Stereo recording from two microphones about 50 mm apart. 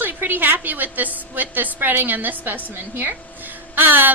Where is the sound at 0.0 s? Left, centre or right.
Right.